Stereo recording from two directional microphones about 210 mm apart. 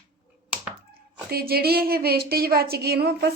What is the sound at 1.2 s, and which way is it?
A woman's voice, 45° right (ahead or behind).